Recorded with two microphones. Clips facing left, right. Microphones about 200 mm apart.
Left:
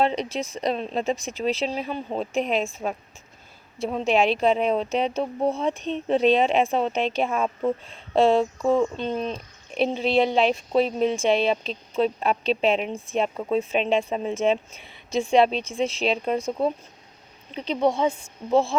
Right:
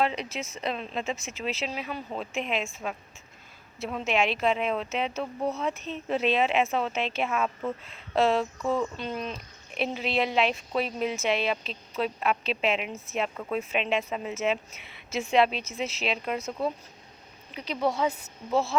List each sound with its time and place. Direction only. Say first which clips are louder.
0.0 s a woman's voice: left 5 dB; 35° left (ahead or behind)
3.8 s a woman's voice: left 6 dB; 35° left (ahead or behind)
5.7 s speech: left 7 dB; 5° right (ahead or behind)
6.3 s a woman's voice: left 5 dB; 35° left (ahead or behind)
6.9 s speech: left 5 dB; centre (ahead or behind)
7.2 s a woman's voice: left 4 dB; 30° left (ahead or behind)